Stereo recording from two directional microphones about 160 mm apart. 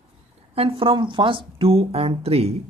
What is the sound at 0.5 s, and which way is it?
Speech, 35° right (ahead or behind).